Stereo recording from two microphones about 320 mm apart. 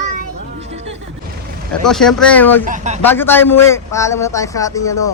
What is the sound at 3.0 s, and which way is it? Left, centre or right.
A man's voice, centre.